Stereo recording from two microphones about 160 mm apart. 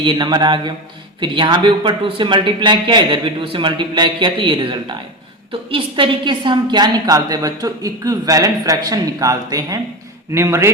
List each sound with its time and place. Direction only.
0.0 s a woman's voice: 30° right (ahead or behind)